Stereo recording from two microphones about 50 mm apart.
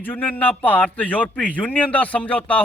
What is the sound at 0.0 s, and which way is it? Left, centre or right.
A man's voice, left.